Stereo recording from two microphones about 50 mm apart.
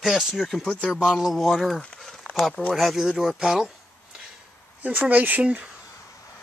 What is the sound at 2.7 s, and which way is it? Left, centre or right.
Speech, centre.